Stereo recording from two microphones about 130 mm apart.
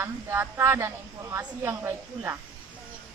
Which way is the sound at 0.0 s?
20° right (ahead or behind).